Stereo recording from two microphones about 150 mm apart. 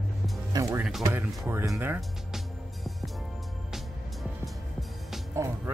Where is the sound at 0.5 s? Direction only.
25° right (ahead or behind).